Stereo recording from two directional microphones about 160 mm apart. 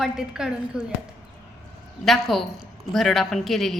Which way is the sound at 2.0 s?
Centre (ahead or behind).